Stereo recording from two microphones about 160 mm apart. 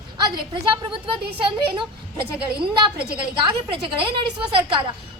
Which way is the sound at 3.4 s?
35° right (ahead or behind).